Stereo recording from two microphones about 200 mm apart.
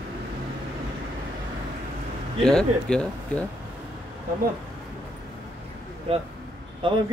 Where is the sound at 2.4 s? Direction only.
5° left (ahead or behind).